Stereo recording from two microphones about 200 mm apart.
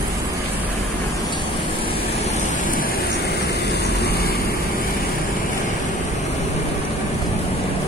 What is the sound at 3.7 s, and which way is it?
Vehicle, 55° left (ahead or behind).